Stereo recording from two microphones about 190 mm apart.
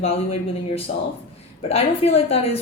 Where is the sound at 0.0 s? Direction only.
30° left (ahead or behind).